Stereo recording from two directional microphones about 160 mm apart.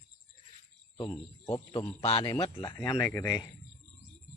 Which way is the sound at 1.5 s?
25° left (ahead or behind).